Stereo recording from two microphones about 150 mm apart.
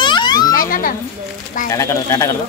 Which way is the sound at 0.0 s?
30° left (ahead or behind).